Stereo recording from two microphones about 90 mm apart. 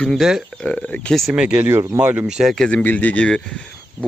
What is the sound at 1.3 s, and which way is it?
Speech, 10° right (ahead or behind).